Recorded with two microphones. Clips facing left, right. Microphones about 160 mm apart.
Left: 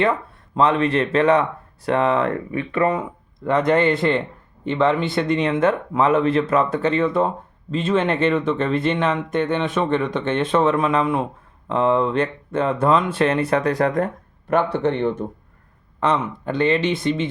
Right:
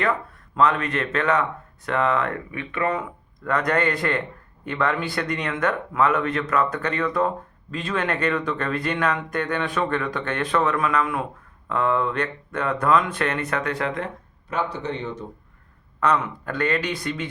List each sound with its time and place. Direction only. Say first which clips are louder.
0.5 s speech: left 4 dB; 30° left (ahead or behind)
14.5 s speech: left 8 dB; 60° left (ahead or behind)
16.0 s speech: left 1 dB; 25° left (ahead or behind)